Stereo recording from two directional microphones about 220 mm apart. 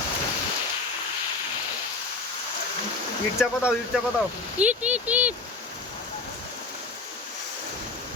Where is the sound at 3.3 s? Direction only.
5° right (ahead or behind).